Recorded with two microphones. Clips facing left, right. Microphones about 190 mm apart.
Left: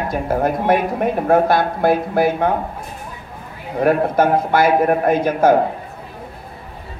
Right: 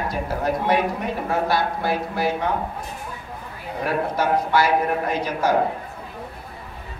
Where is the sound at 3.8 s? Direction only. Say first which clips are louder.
Left 7 dB; 50° left (ahead or behind).